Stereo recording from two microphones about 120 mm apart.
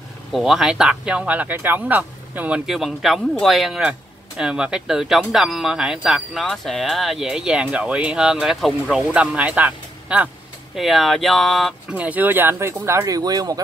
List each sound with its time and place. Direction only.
0.3 s speech: 5° right (ahead or behind)
10.8 s speech: centre (ahead or behind)
11.9 s speech: 15° right (ahead or behind); by 13.6 s 30° right (ahead or behind)